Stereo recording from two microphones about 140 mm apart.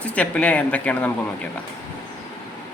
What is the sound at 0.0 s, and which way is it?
Speech, 10° left (ahead or behind).